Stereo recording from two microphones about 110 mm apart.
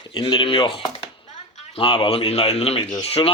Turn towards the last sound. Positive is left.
turn(degrees=60)  # may be behind; listen again after turning